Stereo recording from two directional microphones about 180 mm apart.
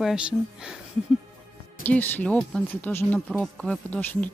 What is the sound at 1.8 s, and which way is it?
Speech, 10° left (ahead or behind).